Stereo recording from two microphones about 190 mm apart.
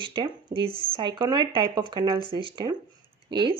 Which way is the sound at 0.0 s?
25° right (ahead or behind).